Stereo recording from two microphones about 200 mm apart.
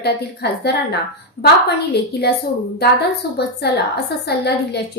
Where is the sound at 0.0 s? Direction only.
55° left (ahead or behind).